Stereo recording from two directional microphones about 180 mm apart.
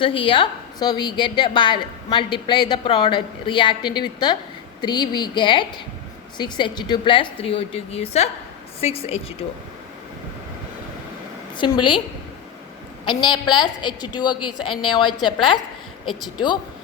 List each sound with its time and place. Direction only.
0.0 s a woman's voice: 30° left (ahead or behind)
11.5 s a woman's voice: 25° left (ahead or behind)
13.1 s a woman's voice: 25° left (ahead or behind)